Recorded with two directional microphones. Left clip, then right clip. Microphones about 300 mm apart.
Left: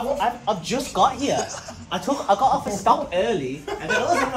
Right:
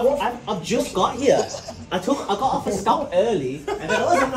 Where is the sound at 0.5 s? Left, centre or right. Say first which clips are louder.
Right 1 dB; centre.